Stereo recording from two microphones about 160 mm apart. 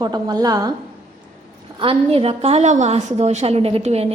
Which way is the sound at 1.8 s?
35° right (ahead or behind).